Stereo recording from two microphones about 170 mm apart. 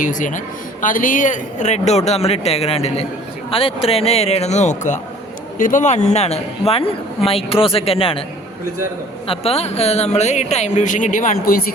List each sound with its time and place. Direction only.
0.0 s speech: 50° left (ahead or behind); by 8.2 s 35° left (ahead or behind)
9.2 s speech: 35° left (ahead or behind); by 11.7 s 60° left (ahead or behind)